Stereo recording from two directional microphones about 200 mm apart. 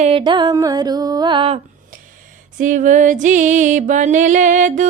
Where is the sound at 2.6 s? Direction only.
40° right (ahead or behind).